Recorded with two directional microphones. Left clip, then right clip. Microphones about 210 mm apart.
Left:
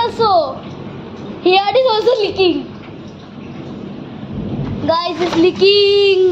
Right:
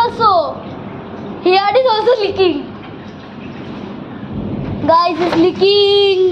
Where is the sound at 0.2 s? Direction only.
10° left (ahead or behind).